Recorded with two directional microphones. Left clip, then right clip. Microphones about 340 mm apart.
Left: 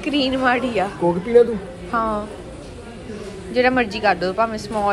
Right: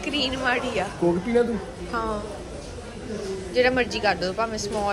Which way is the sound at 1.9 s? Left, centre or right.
Centre.